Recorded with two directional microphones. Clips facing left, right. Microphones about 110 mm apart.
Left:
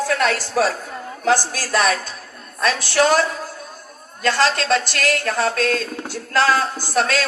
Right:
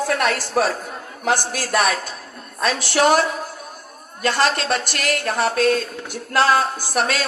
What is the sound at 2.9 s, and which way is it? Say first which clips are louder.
Speech: right 1 dB; 15° right (ahead or behind).